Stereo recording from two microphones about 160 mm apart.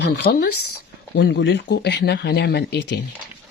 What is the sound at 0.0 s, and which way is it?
Speech, 90° left.